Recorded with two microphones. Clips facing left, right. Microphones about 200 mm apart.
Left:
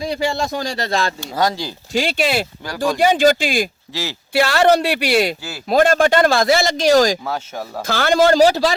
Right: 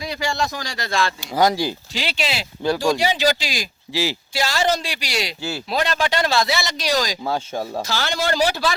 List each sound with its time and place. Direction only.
0.0 s speech: 25° left (ahead or behind)
1.5 s speech: 20° right (ahead or behind)
1.9 s speech: 50° left (ahead or behind)
3.9 s speech: 15° right (ahead or behind)
4.4 s a man's voice: 60° left (ahead or behind); by 8.6 s 40° left (ahead or behind)